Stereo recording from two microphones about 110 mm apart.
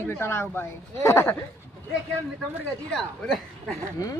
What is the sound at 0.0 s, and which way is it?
Speech, 20° left (ahead or behind).